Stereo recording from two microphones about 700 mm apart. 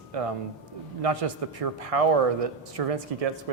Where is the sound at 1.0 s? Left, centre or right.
Right.